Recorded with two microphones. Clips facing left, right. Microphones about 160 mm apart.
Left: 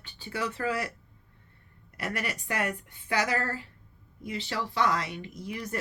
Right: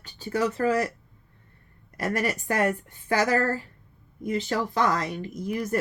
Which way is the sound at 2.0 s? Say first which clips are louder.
Right 7 dB; 40° right (ahead or behind).